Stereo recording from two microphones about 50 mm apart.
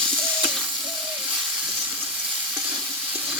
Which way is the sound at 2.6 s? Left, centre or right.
Right.